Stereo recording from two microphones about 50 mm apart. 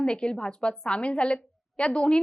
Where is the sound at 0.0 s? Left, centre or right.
Centre.